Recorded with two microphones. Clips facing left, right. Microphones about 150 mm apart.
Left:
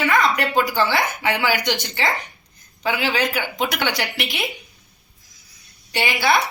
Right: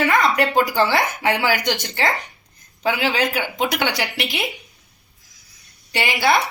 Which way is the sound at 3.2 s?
20° right (ahead or behind).